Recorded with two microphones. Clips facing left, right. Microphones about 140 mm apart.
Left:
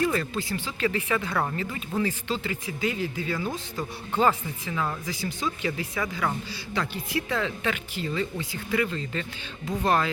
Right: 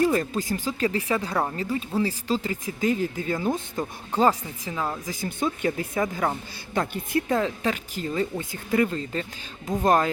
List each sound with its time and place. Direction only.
0.0 s speech: 40° right (ahead or behind)
5.0 s speech: 50° right (ahead or behind)